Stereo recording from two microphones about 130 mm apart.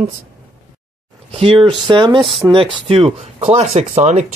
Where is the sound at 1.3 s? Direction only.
45° right (ahead or behind).